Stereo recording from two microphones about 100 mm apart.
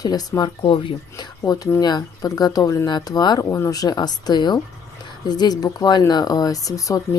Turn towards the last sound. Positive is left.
turn(degrees=35)  # may be behind; listen again after turning